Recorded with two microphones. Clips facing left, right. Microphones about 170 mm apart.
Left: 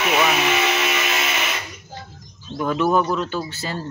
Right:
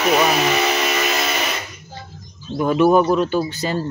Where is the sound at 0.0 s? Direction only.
35° right (ahead or behind).